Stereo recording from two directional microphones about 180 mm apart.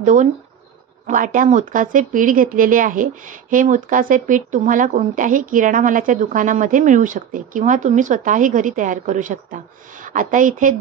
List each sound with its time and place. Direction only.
0.0 s speech: 45° right (ahead or behind)